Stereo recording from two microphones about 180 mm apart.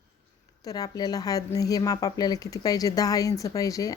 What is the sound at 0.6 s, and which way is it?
Speech, 20° left (ahead or behind).